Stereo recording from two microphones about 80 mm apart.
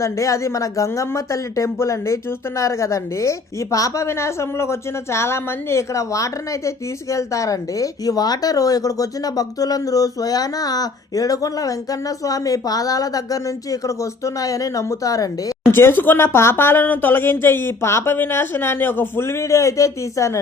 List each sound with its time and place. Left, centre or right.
0.0 s a woman's voice: left
15.7 s speech: left